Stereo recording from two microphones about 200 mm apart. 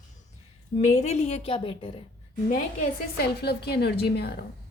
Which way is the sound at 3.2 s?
55° left (ahead or behind).